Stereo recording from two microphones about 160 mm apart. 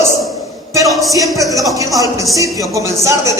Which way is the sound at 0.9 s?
Centre (ahead or behind).